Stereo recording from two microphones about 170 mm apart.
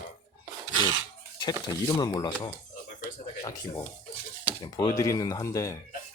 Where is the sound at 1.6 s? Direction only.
20° left (ahead or behind).